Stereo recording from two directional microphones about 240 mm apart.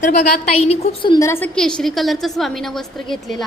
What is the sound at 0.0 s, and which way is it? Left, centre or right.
Speech, left.